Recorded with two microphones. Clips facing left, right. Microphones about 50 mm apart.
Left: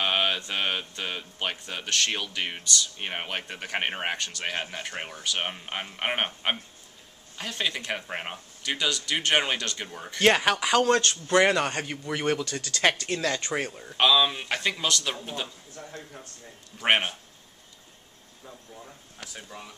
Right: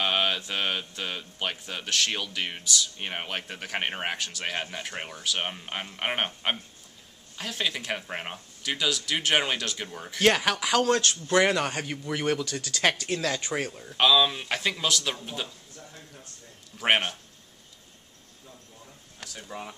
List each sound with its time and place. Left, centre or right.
0.0 s mantra: centre
0.4 s speech: centre
16.7 s speech: centre
19.1 s a sound: centre